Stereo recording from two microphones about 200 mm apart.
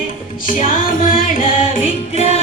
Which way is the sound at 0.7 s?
45° left (ahead or behind).